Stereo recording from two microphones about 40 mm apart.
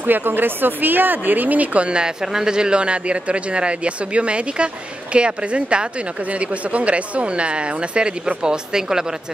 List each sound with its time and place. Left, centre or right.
0.0 s speech: right; by 9.0 s centre